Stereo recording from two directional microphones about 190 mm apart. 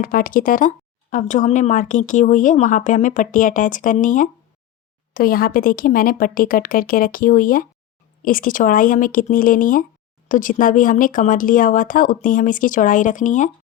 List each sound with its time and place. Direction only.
0.0 s speech: 50° left (ahead or behind)